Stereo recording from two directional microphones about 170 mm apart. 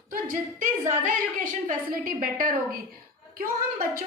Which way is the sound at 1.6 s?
55° right (ahead or behind).